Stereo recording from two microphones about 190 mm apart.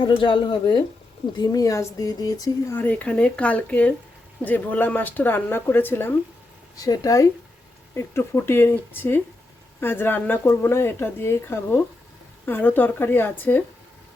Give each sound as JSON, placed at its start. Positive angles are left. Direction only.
{"t": 0.0, "sound": "speech", "side_deg": 25}